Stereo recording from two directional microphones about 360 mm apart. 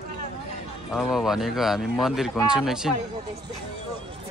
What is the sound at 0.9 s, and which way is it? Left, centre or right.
Speech, centre.